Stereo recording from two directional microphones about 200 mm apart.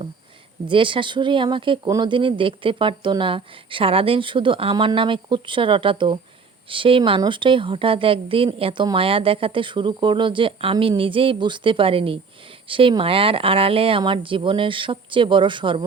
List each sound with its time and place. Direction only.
0.7 s speech: 25° right (ahead or behind)